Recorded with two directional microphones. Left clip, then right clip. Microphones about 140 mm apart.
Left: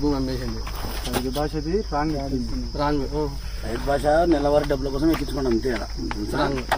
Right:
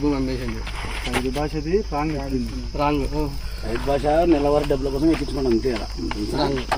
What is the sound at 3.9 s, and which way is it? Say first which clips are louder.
Speech: right 1 dB; 15° right (ahead or behind).